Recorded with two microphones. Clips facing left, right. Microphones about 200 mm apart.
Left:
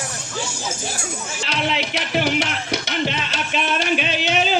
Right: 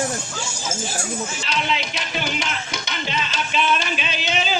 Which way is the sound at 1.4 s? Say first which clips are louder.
Left 4 dB; 65° left (ahead or behind).